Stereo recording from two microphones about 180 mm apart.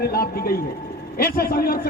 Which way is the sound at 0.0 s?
60° left (ahead or behind).